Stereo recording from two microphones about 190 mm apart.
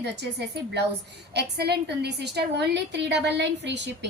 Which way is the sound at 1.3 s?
60° right (ahead or behind).